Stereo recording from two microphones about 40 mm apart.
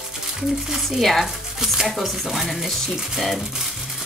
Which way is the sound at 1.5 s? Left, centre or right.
Centre.